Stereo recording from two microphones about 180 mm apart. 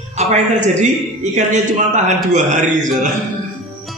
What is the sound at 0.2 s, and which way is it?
A man's voice, 40° right (ahead or behind).